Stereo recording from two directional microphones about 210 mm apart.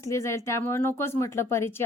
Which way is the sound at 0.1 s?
15° left (ahead or behind).